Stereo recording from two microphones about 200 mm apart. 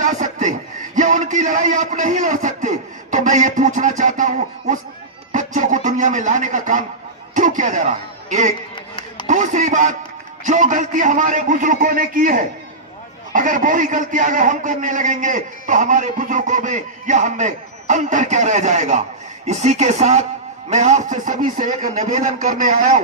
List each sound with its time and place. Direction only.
0.0 s chuckle: 40° right (ahead or behind)
0.9 s a man's voice: 40° right (ahead or behind)
8.7 s a sound: 25° left (ahead or behind)
9.2 s a man's voice: 40° right (ahead or behind)